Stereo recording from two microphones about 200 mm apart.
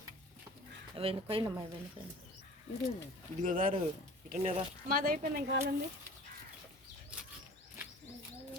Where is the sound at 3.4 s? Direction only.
40° right (ahead or behind).